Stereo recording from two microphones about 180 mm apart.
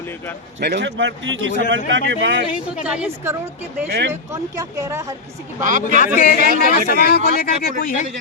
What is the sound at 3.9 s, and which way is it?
Speech, 70° right (ahead or behind).